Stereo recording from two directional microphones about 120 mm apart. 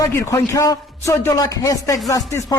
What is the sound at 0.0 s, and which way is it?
A man's voice, 25° left (ahead or behind).